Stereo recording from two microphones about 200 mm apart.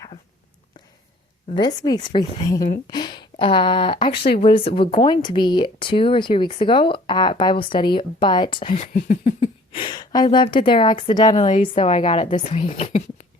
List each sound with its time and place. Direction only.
1.5 s speech: 20° left (ahead or behind)
8.7 s a woman's voice: 40° left (ahead or behind)
9.7 s speech: 25° left (ahead or behind)
11.3 s a woman's voice: 35° left (ahead or behind)